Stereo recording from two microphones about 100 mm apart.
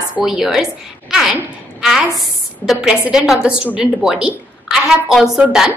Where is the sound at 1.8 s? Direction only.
5° right (ahead or behind).